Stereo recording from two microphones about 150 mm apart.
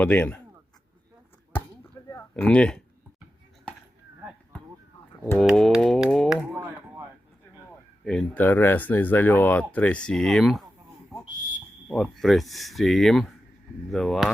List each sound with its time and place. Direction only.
0.0 s speech: 10° left (ahead or behind)
1.5 s chop: 15° left (ahead or behind)
2.3 s speech: 5° left (ahead or behind)
5.4 s speech: centre (ahead or behind); by 7.1 s 15° right (ahead or behind)
8.0 s speech: 10° left (ahead or behind)
12.0 s speech: centre (ahead or behind)